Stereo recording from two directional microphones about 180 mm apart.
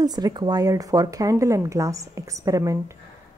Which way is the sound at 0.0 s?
20° right (ahead or behind).